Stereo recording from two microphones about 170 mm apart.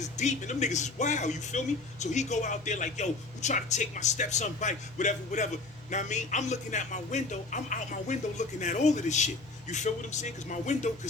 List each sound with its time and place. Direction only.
0.0 s speech: 45° left (ahead or behind)